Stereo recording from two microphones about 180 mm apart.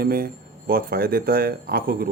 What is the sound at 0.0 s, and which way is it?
Speech, 55° right (ahead or behind).